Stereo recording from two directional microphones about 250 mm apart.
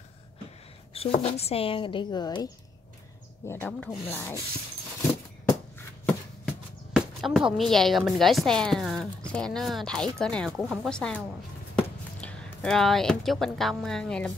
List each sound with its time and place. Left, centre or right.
0.9 s speech: left
6.0 s speech: centre